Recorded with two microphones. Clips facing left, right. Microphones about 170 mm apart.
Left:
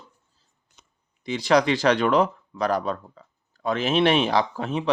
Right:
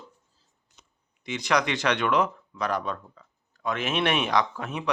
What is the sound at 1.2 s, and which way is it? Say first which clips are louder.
Speech: left 6 dB; 30° left (ahead or behind).